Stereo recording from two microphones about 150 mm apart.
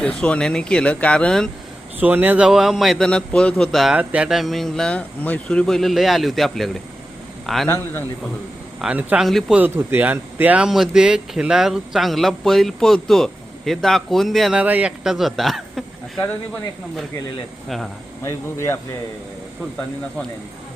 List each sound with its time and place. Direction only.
0.0 s speech: 5° left (ahead or behind)
2.0 s a man's voice: 10° right (ahead or behind)
8.8 s speech: 10° right (ahead or behind)
18.2 s speech: 20° left (ahead or behind)